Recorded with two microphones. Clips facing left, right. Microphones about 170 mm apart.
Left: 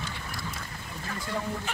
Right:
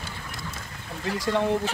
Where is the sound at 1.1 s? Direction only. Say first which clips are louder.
Right 9 dB; 90° right.